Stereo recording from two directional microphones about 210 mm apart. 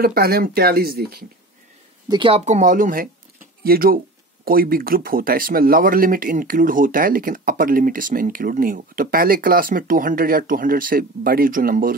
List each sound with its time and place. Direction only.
0.0 s speech: 45° right (ahead or behind)
2.0 s speech: 25° right (ahead or behind); by 11.9 s 40° right (ahead or behind)